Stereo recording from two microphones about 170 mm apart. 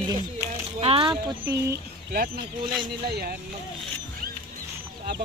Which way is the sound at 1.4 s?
15° right (ahead or behind).